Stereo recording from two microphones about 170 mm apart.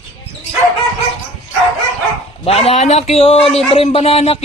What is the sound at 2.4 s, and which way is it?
A man's voice, 35° left (ahead or behind).